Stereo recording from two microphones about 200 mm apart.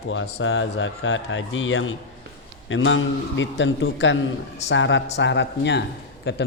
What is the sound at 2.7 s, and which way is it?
Speech, 70° left (ahead or behind).